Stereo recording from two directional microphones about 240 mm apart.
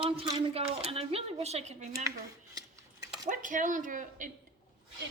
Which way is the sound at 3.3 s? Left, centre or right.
Right.